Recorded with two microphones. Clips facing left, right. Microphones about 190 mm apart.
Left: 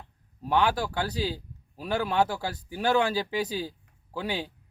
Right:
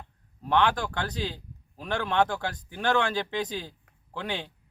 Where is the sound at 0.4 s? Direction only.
10° left (ahead or behind).